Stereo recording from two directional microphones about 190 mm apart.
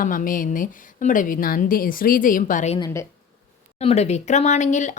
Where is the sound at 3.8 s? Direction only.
35° left (ahead or behind).